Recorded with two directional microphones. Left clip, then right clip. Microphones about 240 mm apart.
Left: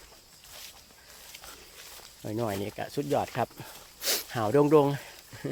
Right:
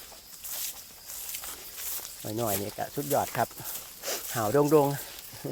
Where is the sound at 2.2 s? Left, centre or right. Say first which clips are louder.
Right 1 dB; centre.